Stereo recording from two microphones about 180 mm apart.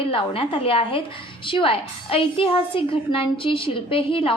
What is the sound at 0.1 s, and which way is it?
A woman's voice, 30° left (ahead or behind).